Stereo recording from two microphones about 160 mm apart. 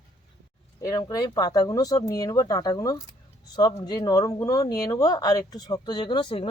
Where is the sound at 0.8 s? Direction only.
20° left (ahead or behind).